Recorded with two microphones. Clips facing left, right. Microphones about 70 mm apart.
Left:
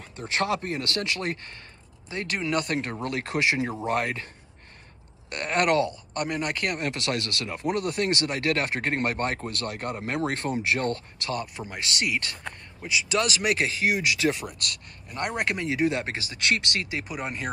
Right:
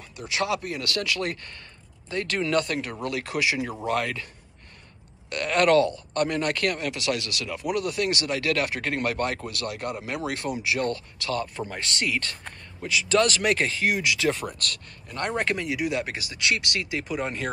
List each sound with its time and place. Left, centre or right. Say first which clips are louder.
0.0 s speech: left 1 dB; left
5.3 s speech: right 3 dB; left
6.9 s speech: right 1 dB; left
11.4 s speech: right 2 dB; centre
17.1 s speech: right 3 dB; centre